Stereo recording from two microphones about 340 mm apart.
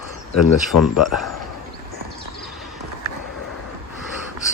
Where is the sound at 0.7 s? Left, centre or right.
Left.